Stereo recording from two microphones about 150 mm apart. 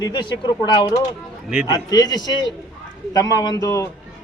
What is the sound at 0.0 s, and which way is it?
Speech, 30° left (ahead or behind).